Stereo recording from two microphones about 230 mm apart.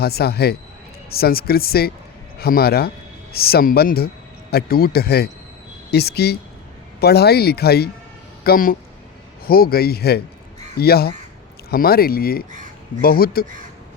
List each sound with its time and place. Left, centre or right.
0.0 s speech: left